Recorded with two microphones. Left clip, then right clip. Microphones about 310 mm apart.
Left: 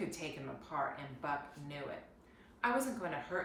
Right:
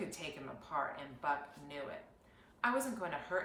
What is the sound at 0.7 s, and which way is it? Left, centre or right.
A woman's voice, centre.